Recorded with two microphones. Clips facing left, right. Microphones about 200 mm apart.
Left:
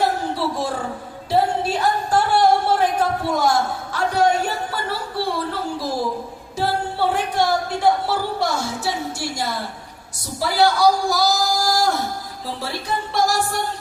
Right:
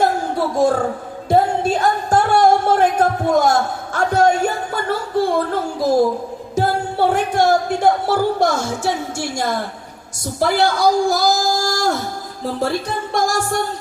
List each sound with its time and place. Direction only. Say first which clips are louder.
0.0 s a sound: right 3 dB; 45° right (ahead or behind)
1.3 s music: right 4 dB; 50° right (ahead or behind)
6.6 s speech: right 4 dB; 45° right (ahead or behind)